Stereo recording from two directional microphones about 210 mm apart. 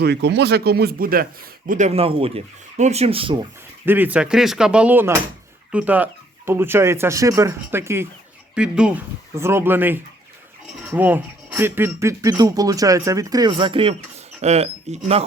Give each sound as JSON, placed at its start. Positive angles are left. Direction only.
{"t": 0.0, "sound": "a man's voice", "side_deg": -55}
{"t": 3.8, "sound": "a man's voice", "side_deg": -10}